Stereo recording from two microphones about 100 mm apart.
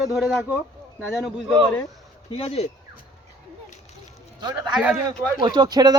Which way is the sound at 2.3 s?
90° left.